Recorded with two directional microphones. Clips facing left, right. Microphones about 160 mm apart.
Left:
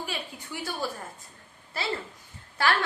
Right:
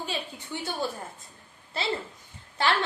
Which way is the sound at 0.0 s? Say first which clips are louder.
Right 2 dB; 25° right (ahead or behind).